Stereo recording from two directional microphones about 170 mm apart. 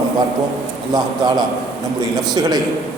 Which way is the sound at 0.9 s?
25° right (ahead or behind).